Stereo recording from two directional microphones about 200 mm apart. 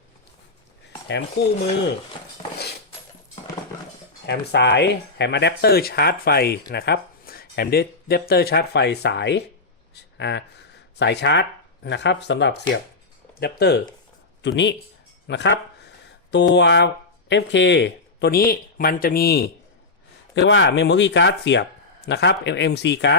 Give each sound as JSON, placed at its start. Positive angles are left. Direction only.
{"t": 1.4, "sound": "speech", "side_deg": 55}
{"t": 4.3, "sound": "speech", "side_deg": 60}
{"t": 20.3, "sound": "speech", "side_deg": 65}